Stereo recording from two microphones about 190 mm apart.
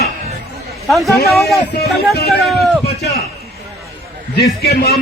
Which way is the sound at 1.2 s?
Centre (ahead or behind).